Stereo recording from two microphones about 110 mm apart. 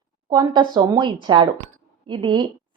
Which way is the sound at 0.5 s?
40° right (ahead or behind).